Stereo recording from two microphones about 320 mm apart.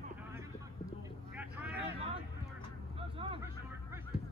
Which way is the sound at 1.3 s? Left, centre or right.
Centre.